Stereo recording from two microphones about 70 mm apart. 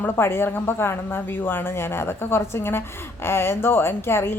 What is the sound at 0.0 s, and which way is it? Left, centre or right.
Speech, left.